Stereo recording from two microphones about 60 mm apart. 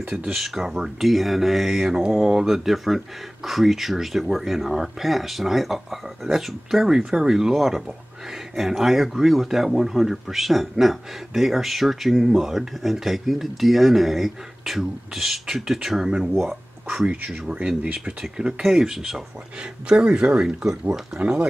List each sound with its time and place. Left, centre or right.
0.3 s speech: centre; by 21.5 s right